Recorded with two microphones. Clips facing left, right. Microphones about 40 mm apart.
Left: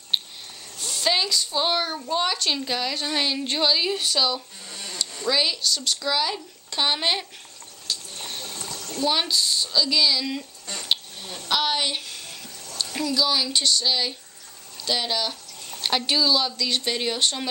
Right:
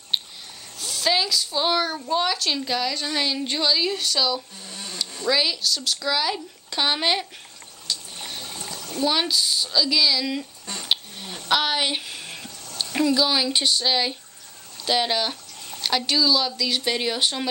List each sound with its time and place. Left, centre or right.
0.1 s a sound: centre
0.7 s a woman's voice: centre
7.8 s water: centre
8.5 s a sound: centre
9.0 s speech: centre
15.8 s speech: centre